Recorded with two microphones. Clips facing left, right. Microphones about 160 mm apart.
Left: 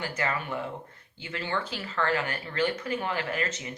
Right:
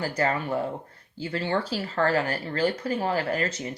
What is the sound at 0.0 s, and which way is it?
Speech, 35° right (ahead or behind).